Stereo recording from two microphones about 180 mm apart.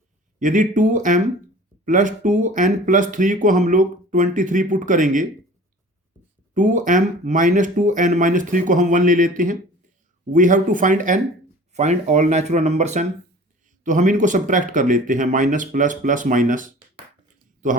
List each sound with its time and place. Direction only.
0.3 s speech: 45° right (ahead or behind)
6.5 s speech: 45° right (ahead or behind)